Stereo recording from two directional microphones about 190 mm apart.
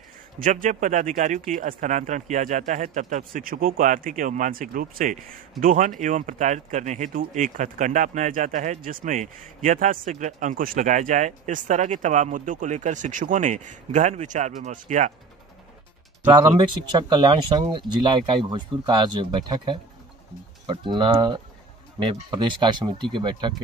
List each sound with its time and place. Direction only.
0.4 s speech: 45° right (ahead or behind)
16.3 s speech: 25° right (ahead or behind)